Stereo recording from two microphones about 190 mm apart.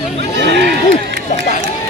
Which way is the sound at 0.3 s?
60° right (ahead or behind).